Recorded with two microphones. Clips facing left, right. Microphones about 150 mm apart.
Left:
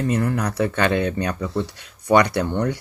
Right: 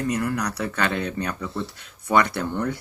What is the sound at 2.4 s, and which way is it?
Speech, 20° left (ahead or behind).